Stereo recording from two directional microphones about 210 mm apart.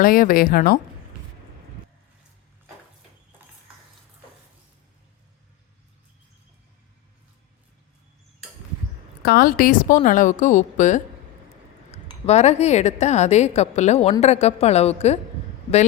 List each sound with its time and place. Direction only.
0.0 s speech: 40° left (ahead or behind)
9.2 s speech: 45° left (ahead or behind); by 15.2 s 30° left (ahead or behind)